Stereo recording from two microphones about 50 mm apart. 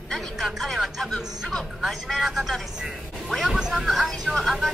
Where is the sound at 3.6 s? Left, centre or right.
Centre.